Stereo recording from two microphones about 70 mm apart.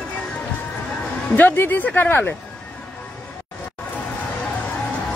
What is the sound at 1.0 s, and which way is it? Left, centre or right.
Speech, left.